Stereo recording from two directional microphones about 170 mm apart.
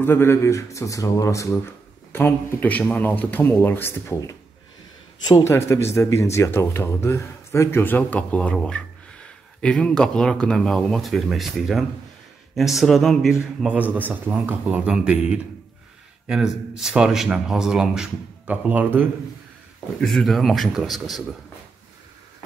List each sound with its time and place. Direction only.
0.0 s a man's voice: 15° left (ahead or behind); by 19.0 s 10° right (ahead or behind)
20.0 s a man's voice: centre (ahead or behind)